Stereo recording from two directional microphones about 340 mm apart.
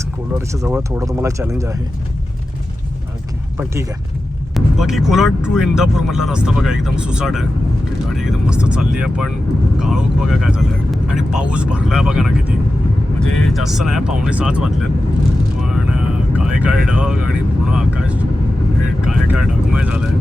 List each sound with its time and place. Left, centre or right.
0.3 s speech: centre
4.5 s speech: centre
15.6 s vehicle: centre
19.0 s speech: centre